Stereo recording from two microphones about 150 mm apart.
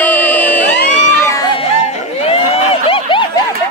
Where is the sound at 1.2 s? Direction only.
20° left (ahead or behind).